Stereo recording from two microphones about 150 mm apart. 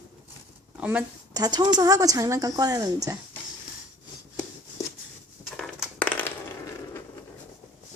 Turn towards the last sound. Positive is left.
turn(degrees=10)  # may be behind; listen again after turning